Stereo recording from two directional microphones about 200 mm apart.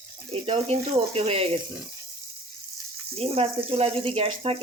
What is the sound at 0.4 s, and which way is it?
Speech, 30° right (ahead or behind).